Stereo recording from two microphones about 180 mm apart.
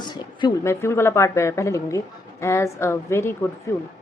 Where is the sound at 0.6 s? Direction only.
15° left (ahead or behind).